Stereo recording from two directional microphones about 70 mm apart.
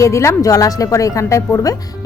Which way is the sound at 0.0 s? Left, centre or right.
Left.